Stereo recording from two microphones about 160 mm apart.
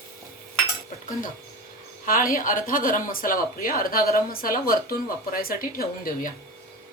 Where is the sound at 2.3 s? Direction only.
60° left (ahead or behind).